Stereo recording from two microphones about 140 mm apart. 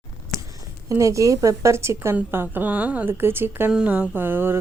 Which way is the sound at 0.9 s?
20° right (ahead or behind).